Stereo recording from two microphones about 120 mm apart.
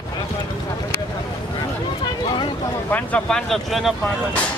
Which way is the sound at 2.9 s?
10° left (ahead or behind).